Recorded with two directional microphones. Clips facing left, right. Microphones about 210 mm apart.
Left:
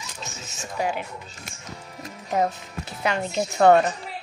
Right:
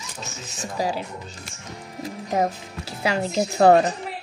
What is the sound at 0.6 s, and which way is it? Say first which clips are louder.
Speech: right 1 dB; 35° right (ahead or behind).